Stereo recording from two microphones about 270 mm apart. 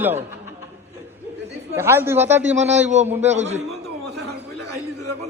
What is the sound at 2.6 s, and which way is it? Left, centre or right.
A man's voice, right.